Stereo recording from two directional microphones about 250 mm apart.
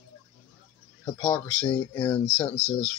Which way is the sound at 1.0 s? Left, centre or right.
Centre.